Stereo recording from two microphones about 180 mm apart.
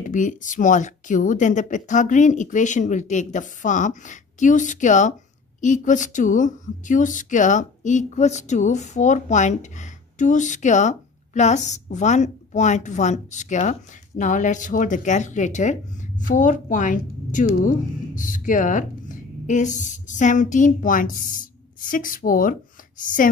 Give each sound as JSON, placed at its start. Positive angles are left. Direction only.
{"t": 0.0, "sound": "a woman's voice", "side_deg": 45}